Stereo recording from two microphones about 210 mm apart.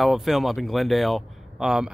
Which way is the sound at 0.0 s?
Centre (ahead or behind).